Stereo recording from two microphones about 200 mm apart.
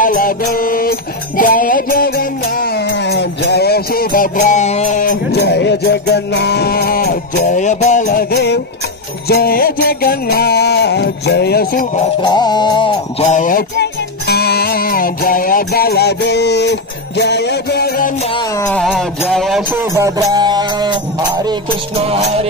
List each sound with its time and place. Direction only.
0.0 s music: 45° left (ahead or behind)
12.2 s music: 20° left (ahead or behind)
13.3 s music: 40° left (ahead or behind)
18.7 s music: centre (ahead or behind)
19.7 s music: 15° right (ahead or behind)